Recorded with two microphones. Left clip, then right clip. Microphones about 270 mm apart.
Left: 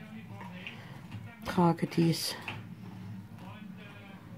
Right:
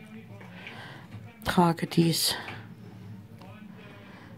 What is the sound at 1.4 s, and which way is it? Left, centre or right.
Speech, right.